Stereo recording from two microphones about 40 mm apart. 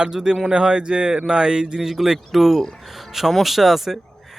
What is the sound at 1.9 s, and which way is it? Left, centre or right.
Speech, centre.